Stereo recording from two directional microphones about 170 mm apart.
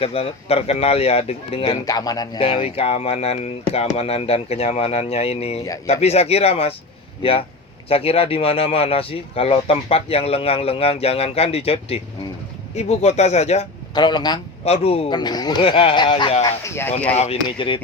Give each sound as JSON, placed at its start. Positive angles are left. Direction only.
{"t": 0.0, "sound": "speech", "side_deg": 35}
{"t": 1.8, "sound": "speech", "side_deg": 20}
{"t": 2.4, "sound": "speech", "side_deg": 35}
{"t": 5.6, "sound": "speech", "side_deg": 20}
{"t": 5.9, "sound": "speech", "side_deg": 40}
{"t": 13.9, "sound": "speech", "side_deg": 25}
{"t": 14.6, "sound": "speech", "side_deg": 35}
{"t": 16.6, "sound": "speech", "side_deg": 15}
{"t": 17.2, "sound": "speech", "side_deg": 35}